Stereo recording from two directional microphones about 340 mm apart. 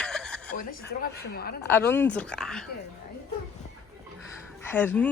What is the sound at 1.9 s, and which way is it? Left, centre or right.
Speech, centre.